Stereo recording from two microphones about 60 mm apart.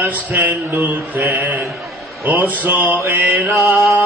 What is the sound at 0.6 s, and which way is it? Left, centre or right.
Speech, right.